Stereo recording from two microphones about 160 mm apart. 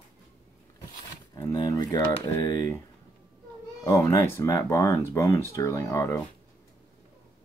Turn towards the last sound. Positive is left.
turn(degrees=20)  # may be behind; listen again after turning